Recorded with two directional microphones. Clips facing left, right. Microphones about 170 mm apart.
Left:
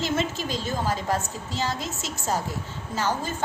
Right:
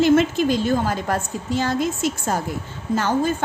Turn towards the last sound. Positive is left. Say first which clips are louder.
# right 7 dB
turn(degrees=-55)  # may be behind; listen again after turning